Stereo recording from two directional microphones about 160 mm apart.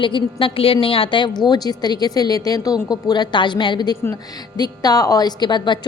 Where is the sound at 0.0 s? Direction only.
30° left (ahead or behind).